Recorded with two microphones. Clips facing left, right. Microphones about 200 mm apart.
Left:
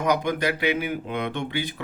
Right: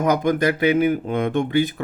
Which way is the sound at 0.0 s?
50° right (ahead or behind).